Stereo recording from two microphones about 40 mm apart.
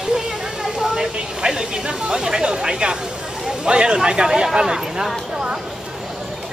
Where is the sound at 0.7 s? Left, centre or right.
Centre.